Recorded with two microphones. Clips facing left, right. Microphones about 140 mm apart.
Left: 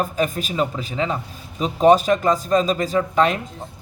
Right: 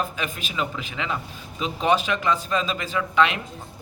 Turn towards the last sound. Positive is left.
turn(degrees=40)  # may be behind; listen again after turning